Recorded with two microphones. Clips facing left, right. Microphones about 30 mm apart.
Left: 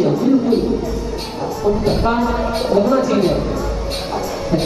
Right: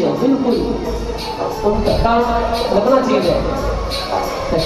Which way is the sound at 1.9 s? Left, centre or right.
Right.